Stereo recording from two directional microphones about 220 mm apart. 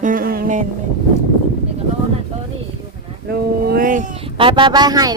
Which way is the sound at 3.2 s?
45° right (ahead or behind).